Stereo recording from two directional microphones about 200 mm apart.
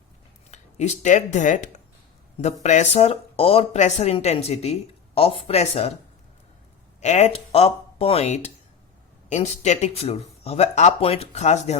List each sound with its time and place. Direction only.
0.5 s speech: 35° left (ahead or behind)
7.0 s speech: 35° left (ahead or behind)